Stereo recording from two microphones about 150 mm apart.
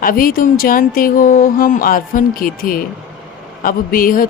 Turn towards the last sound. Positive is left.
turn(degrees=70)  # may be behind; listen again after turning